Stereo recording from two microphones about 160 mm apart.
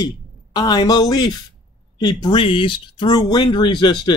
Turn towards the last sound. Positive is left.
turn(degrees=30)  # may be behind; listen again after turning